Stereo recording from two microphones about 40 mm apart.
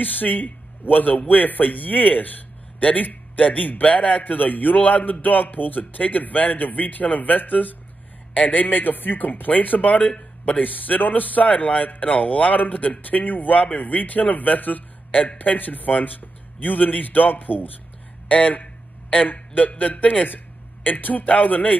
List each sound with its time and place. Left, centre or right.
0.0 s a man's voice: left
4.2 s speech: left
18.3 s a man's voice: left
19.8 s speech: left